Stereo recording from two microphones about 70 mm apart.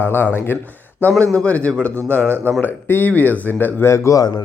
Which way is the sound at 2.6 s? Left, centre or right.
Left.